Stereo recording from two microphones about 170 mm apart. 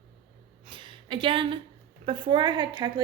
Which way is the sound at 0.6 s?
30° right (ahead or behind).